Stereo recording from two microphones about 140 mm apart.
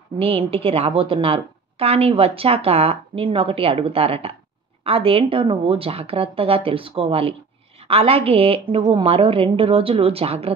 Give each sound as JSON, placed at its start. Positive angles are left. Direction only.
{"t": 0.2, "sound": "a woman's voice", "side_deg": -40}